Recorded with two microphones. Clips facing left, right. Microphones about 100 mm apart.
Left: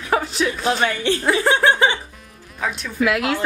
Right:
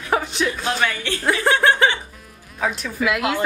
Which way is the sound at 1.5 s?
20° left (ahead or behind).